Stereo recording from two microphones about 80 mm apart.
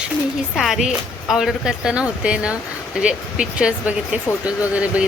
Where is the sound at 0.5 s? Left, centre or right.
Centre.